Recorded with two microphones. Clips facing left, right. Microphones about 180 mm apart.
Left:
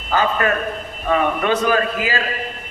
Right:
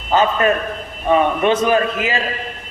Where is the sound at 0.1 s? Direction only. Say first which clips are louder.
Right 3 dB; 20° right (ahead or behind).